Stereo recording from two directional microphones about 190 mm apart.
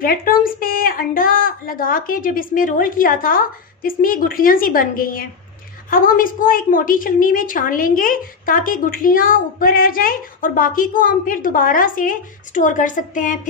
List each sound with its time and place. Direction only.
0.0 s a woman's voice: 50° left (ahead or behind)